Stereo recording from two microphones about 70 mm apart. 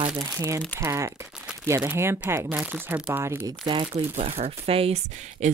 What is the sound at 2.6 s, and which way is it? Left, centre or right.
Speech, right.